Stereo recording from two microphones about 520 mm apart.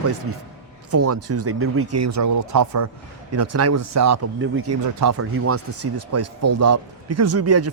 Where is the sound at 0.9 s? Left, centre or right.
Right.